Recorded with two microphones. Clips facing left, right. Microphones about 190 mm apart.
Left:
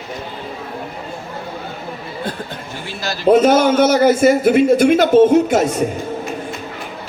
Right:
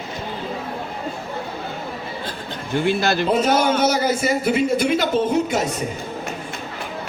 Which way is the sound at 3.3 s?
50° left (ahead or behind).